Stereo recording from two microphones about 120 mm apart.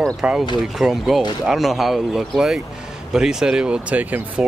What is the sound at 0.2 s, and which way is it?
Speech, 5° right (ahead or behind).